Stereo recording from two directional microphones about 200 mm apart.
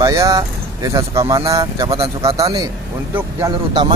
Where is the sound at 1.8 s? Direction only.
25° right (ahead or behind).